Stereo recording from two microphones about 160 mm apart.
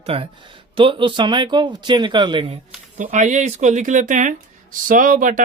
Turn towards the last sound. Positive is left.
turn(degrees=-55)  # may be behind; listen again after turning